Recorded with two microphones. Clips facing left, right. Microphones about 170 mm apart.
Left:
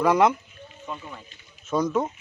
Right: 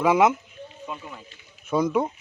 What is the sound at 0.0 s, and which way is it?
Speech, 5° right (ahead or behind).